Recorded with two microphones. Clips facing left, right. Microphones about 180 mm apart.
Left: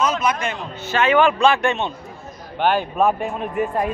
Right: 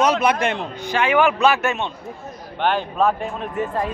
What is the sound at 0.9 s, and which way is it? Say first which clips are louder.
A man's voice: left 1 dB; 10° right (ahead or behind).